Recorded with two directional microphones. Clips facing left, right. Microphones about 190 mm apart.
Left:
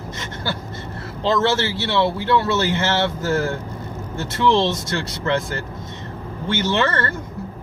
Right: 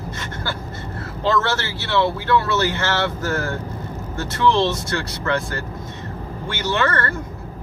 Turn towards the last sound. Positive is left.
turn(degrees=25)  # may be behind; listen again after turning